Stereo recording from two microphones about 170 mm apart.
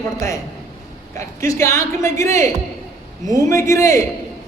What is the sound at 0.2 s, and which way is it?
A woman's voice, 20° left (ahead or behind).